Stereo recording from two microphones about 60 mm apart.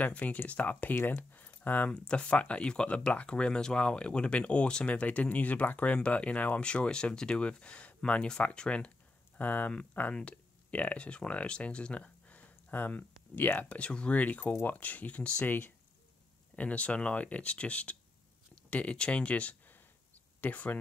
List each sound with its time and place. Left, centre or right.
0.0 s speech: left
1.1 s keys jangling: left
1.9 s speech: centre
14.5 s speech: left
14.8 s speech: left
16.5 s speech: left